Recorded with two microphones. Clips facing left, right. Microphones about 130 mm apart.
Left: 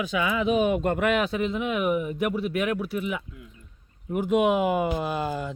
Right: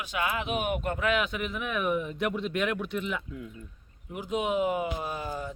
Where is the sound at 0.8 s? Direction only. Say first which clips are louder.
Left 7 dB; 90° left.